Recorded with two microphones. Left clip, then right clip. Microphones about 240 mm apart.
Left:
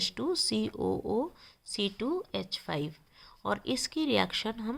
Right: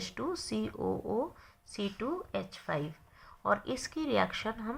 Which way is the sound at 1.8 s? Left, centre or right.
Left.